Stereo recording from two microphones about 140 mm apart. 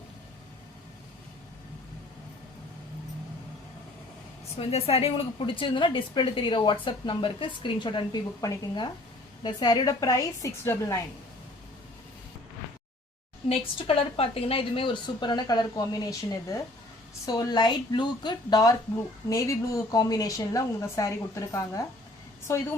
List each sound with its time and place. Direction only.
4.5 s a woman's voice: 45° left (ahead or behind); by 11.0 s 20° left (ahead or behind)
13.5 s a woman's voice: 40° left (ahead or behind); by 21.8 s 20° left (ahead or behind)